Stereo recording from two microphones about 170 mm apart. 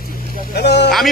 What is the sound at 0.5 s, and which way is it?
Vehicle, 85° left.